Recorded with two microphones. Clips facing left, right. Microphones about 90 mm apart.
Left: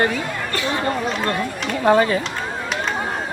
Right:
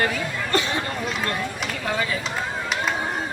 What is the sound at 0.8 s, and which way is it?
Chatter, 40° left (ahead or behind).